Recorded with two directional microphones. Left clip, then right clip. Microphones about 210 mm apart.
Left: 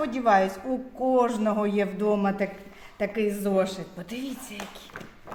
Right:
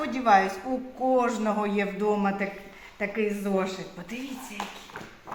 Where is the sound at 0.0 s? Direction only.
50° left (ahead or behind).